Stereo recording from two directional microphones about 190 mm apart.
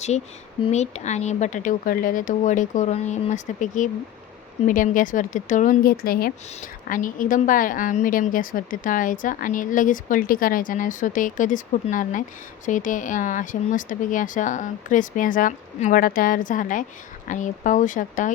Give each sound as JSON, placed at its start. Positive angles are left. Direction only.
{"t": 0.6, "sound": "a woman's voice", "side_deg": 35}